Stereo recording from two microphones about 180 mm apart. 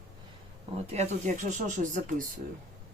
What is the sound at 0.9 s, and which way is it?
Speech, 40° right (ahead or behind).